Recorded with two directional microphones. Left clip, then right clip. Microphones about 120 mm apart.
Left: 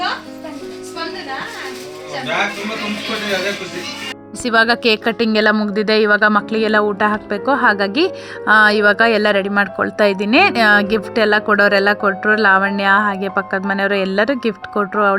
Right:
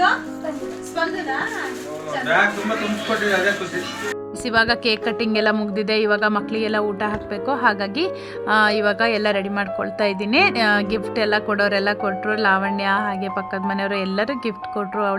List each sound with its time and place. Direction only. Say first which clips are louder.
4.4 s a woman's voice: left 5 dB; 40° left (ahead or behind)